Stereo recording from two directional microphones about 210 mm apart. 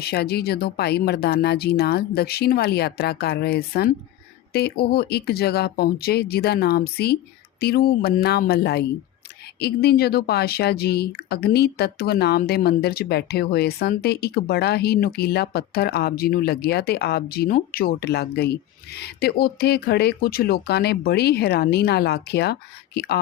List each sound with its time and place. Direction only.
0.0 s speech: 50° left (ahead or behind)